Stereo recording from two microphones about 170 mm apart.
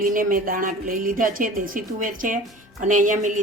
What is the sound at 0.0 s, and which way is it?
A woman's voice, 55° right (ahead or behind).